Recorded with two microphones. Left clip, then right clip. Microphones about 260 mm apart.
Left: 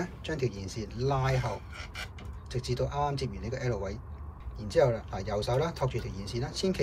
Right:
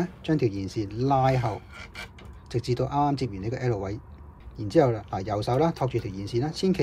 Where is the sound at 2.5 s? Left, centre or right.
Right.